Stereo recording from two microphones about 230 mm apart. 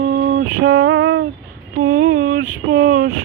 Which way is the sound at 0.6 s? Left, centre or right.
Right.